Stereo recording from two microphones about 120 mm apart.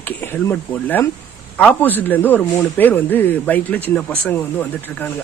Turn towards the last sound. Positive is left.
turn(degrees=15)  # may be behind; listen again after turning